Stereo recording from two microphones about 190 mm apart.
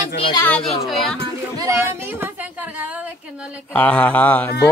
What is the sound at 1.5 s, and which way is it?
Speech, 15° right (ahead or behind).